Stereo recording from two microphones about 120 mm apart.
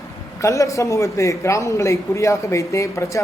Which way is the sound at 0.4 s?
25° left (ahead or behind).